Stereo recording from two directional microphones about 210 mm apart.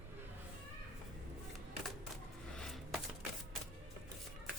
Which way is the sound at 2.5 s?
Centre (ahead or behind).